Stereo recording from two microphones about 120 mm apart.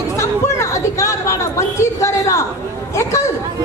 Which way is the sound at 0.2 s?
25° left (ahead or behind).